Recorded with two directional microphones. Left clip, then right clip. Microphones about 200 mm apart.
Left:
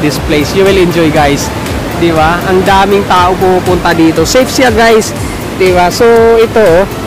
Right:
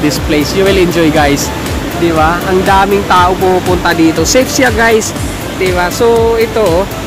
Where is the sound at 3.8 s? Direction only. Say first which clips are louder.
Left 2 dB; 15° left (ahead or behind).